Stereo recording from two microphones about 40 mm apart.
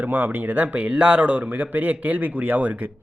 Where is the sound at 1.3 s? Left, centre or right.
Right.